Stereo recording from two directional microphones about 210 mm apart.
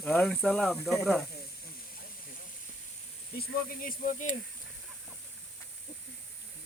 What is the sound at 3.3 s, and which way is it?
Speech, 40° left (ahead or behind).